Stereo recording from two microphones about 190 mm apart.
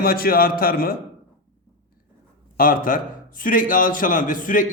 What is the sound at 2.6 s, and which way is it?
A man's voice, 45° left (ahead or behind).